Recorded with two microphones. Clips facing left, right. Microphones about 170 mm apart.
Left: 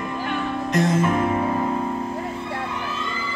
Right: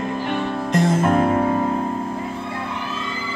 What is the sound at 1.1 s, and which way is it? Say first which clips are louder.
Music: right 4 dB; 55° right (ahead or behind).